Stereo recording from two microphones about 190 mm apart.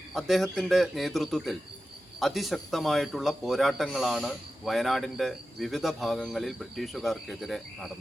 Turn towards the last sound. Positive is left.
turn(degrees=0)  # may be behind; listen again after turning